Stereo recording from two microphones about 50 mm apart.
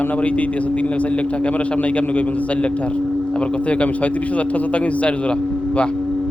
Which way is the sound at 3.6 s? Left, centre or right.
Left.